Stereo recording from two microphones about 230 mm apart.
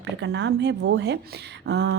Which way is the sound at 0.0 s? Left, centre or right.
Right.